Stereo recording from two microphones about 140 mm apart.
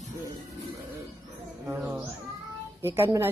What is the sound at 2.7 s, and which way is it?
Speech, 15° right (ahead or behind).